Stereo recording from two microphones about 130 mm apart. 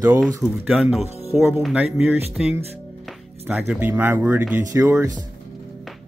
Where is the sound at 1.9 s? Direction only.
15° right (ahead or behind).